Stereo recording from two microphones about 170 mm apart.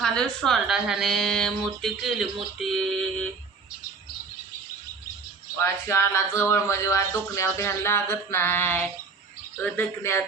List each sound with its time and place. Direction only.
0.0 s a woman's voice: 5° left (ahead or behind)
5.5 s speech: 15° left (ahead or behind)